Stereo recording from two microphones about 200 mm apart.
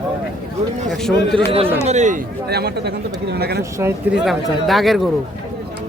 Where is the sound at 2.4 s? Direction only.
55° right (ahead or behind).